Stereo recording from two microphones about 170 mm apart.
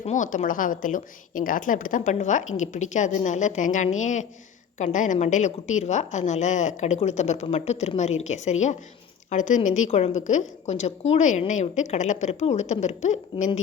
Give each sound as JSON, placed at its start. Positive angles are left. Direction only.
{"t": 0.0, "sound": "a woman's voice", "side_deg": 45}